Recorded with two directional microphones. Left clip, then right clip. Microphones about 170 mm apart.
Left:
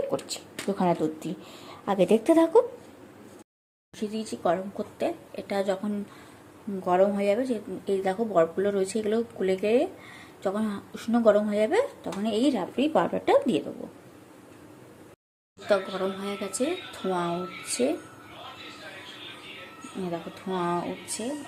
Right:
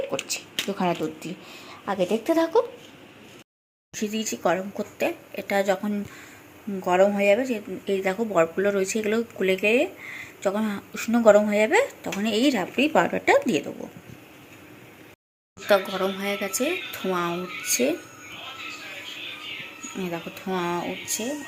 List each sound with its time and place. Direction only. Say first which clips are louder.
0.1 s speech: right 2 dB; 10° left (ahead or behind)
2.0 s speech: left 2 dB; 25° left (ahead or behind)
3.9 s speech: right 4 dB; 5° right (ahead or behind)
15.7 s speech: right 4 dB; centre (ahead or behind)
20.1 s speech: right 2 dB; centre (ahead or behind)